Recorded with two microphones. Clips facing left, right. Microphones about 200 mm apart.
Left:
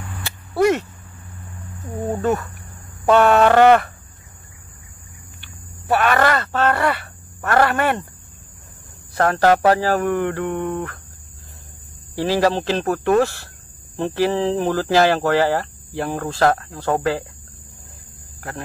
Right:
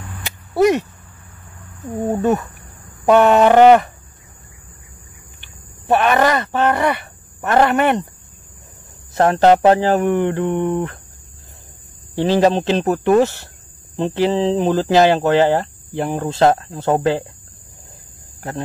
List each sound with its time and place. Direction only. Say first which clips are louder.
0.2 s a sound: right 3 dB; 15° right (ahead or behind)
2.0 s speech: right 3 dB; 20° right (ahead or behind)
3.1 s a sound: right 2 dB; 15° right (ahead or behind)
5.4 s speech: left 2 dB; 20° right (ahead or behind)
9.1 s speech: right 4 dB; 25° right (ahead or behind)
12.2 s speech: right 4 dB; 20° right (ahead or behind)